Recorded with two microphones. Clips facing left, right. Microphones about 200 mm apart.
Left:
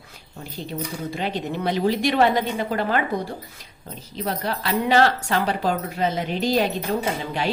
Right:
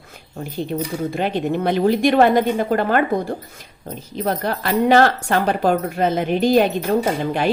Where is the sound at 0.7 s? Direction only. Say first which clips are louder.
Right 5 dB; 55° right (ahead or behind).